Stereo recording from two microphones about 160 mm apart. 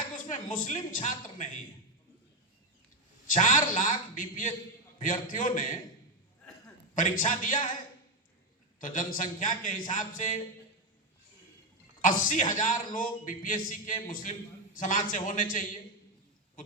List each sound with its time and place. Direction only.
0.0 s speech: 60° left (ahead or behind)
3.2 s a man's voice: 55° left (ahead or behind)
6.9 s a man's voice: 55° left (ahead or behind)
8.8 s a man's voice: 55° left (ahead or behind)
12.0 s a man's voice: 55° left (ahead or behind)